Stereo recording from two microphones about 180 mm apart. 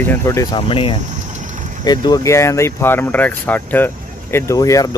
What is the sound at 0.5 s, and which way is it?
Speech, 30° left (ahead or behind).